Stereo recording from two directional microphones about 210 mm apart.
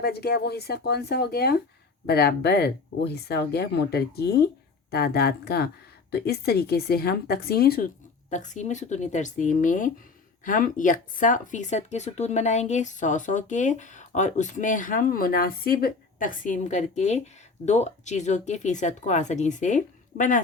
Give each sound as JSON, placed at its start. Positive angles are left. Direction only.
{"t": 0.0, "sound": "speech", "side_deg": 50}
{"t": 8.3, "sound": "speech", "side_deg": 35}